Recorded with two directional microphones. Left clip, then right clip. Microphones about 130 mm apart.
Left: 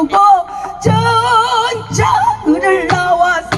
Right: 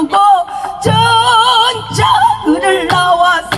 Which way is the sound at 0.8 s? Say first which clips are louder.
Right 3 dB; 40° left (ahead or behind).